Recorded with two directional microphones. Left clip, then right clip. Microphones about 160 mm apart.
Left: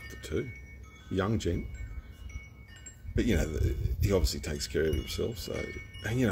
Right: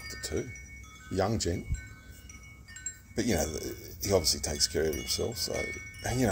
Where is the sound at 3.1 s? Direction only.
50° left (ahead or behind).